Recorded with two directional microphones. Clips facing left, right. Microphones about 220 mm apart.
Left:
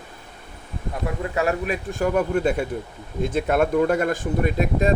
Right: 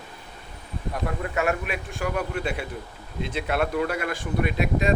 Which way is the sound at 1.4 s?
35° left (ahead or behind).